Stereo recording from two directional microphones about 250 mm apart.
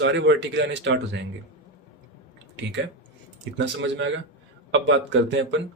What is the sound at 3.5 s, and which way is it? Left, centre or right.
Speech, right.